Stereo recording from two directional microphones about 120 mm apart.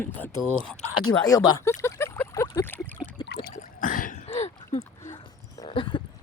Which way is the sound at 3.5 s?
85° left.